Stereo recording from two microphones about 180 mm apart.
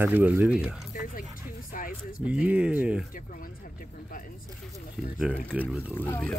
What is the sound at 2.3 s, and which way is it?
Speech, 5° right (ahead or behind).